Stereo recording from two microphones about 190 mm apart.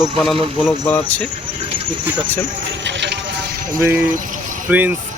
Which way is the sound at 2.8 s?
70° right (ahead or behind).